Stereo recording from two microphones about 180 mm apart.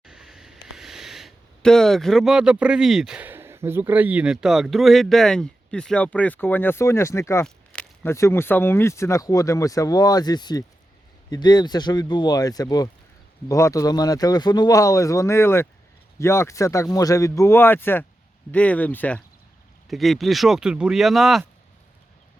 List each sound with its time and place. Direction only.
0.0 s speech: 5° right (ahead or behind); by 7.4 s 15° left (ahead or behind)
7.4 s speech: 5° left (ahead or behind)